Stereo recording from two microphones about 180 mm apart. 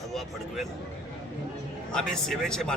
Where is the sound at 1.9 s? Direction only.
5° left (ahead or behind).